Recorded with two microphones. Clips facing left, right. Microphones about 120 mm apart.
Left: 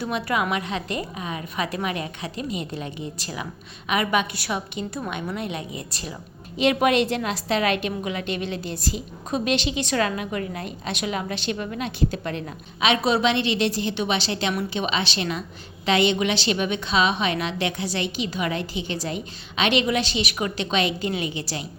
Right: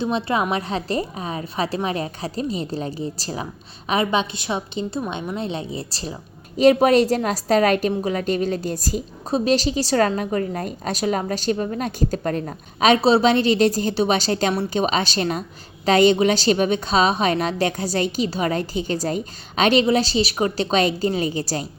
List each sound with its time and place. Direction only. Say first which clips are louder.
0.0 s a woman's voice: right 3 dB; 25° right (ahead or behind)